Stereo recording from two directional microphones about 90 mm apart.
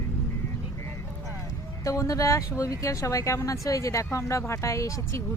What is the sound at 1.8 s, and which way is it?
Speech, 35° left (ahead or behind).